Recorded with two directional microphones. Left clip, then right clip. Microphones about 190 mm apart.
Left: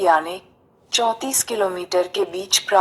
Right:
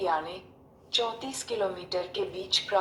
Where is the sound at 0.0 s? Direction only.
45° left (ahead or behind).